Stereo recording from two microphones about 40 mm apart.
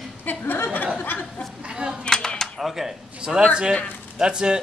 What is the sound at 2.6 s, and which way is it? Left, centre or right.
Speech, centre.